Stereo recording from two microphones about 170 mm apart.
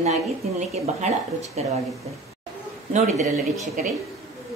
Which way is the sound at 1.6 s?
40° right (ahead or behind).